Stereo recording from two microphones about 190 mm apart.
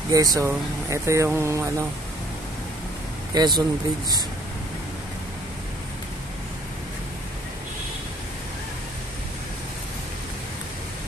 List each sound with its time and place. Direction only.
0.1 s speech: 20° right (ahead or behind)
3.3 s speech: 20° right (ahead or behind)